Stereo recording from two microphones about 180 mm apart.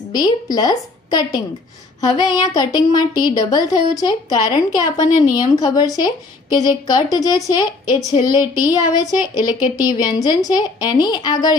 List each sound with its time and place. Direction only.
0.1 s speech: 20° left (ahead or behind)
2.0 s speech: 20° left (ahead or behind)